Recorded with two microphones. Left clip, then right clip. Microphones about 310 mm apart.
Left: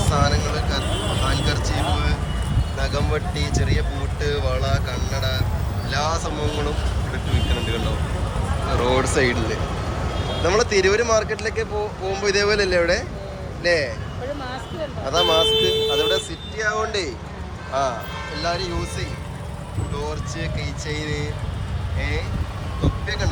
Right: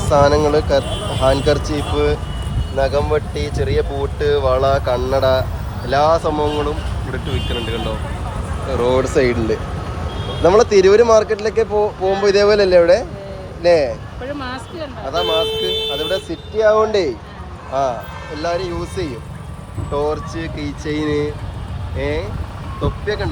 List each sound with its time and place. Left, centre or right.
0.1 s speech: centre
15.1 s speech: centre
18.3 s speech: centre